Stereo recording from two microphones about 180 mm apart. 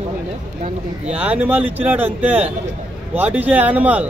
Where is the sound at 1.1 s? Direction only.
10° right (ahead or behind).